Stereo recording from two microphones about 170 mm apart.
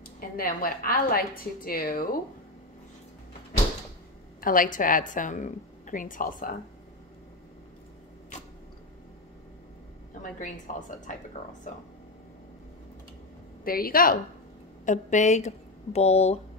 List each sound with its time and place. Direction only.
0.4 s a woman's voice: 55° left (ahead or behind)
4.4 s a woman's voice: 55° left (ahead or behind)
10.7 s a woman's voice: 50° left (ahead or behind)
13.7 s a woman's voice: 60° left (ahead or behind)
14.9 s a woman's voice: 45° left (ahead or behind)